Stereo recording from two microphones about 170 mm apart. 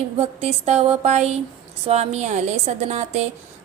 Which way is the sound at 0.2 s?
35° right (ahead or behind).